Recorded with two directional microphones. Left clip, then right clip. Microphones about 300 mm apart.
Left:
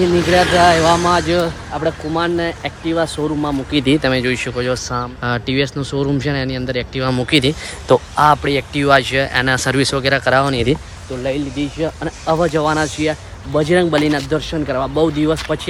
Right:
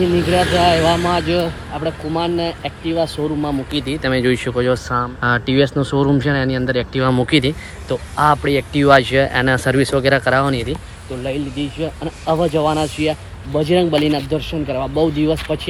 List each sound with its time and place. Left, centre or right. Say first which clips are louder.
0.0 s speech: left 2 dB; left; by 3.5 s centre
3.7 s speech: left 6 dB; left
4.0 s speech: even; centre
11.8 s speech: left 3 dB; centre